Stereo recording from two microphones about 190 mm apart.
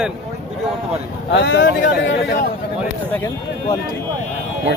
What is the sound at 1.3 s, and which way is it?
Speech, 65° left (ahead or behind).